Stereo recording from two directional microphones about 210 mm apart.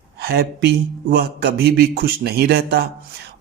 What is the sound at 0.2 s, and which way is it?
Speech, 45° right (ahead or behind).